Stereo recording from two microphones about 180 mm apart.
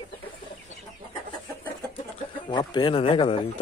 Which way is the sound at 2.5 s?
25° left (ahead or behind).